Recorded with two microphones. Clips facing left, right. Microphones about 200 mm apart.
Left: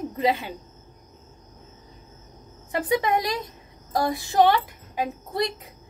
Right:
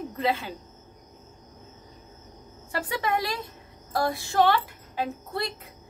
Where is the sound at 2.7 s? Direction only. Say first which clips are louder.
Left 5 dB; 20° left (ahead or behind).